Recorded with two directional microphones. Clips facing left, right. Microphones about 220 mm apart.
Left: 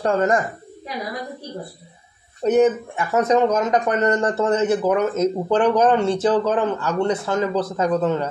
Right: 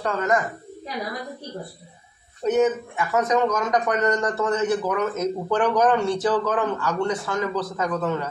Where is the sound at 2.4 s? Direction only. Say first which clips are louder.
Left 4 dB; 30° left (ahead or behind).